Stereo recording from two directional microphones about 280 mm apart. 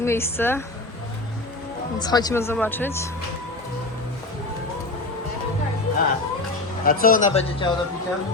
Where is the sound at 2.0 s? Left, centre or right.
Centre.